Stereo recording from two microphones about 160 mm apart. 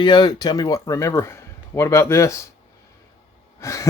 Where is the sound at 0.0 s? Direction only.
30° left (ahead or behind).